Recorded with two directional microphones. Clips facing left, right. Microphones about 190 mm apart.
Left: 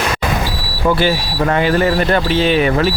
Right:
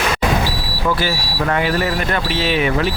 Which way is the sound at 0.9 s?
25° left (ahead or behind).